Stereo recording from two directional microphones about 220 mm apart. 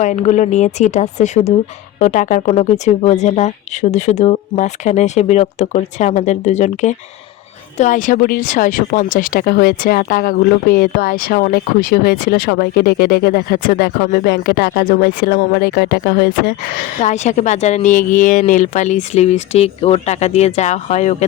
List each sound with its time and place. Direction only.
0.0 s speech: 35° left (ahead or behind)